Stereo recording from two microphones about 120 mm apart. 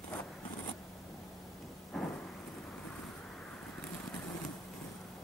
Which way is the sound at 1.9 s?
5° left (ahead or behind).